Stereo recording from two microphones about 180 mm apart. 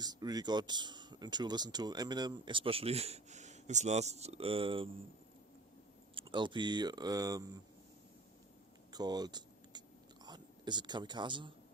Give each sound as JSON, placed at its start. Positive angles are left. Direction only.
{"t": 0.0, "sound": "speech", "side_deg": -20}
{"t": 6.1, "sound": "speech", "side_deg": -25}
{"t": 8.9, "sound": "a sound", "side_deg": -20}
{"t": 10.2, "sound": "speech", "side_deg": -25}